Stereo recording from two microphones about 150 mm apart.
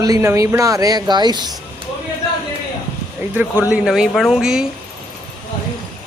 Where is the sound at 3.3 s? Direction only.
10° right (ahead or behind).